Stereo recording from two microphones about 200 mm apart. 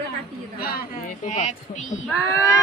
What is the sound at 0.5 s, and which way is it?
Speech, 50° left (ahead or behind).